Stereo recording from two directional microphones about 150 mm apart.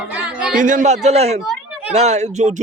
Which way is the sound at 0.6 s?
60° right (ahead or behind).